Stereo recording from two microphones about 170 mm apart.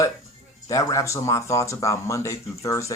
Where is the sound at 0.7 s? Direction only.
20° left (ahead or behind).